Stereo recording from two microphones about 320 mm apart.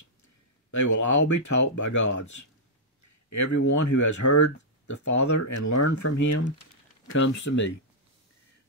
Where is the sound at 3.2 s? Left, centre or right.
Left.